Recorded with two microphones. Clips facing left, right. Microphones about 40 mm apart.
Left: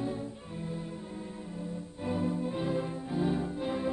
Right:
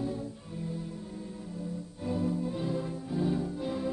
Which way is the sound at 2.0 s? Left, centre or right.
Left.